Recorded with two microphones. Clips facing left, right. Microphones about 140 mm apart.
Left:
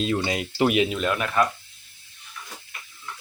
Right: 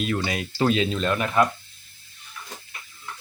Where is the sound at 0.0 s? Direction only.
25° left (ahead or behind); by 1.3 s 5° left (ahead or behind).